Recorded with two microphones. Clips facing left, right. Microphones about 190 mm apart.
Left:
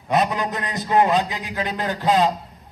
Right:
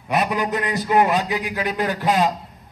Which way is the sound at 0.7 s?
25° left (ahead or behind).